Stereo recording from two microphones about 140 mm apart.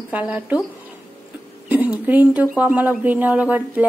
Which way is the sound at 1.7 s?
10° right (ahead or behind).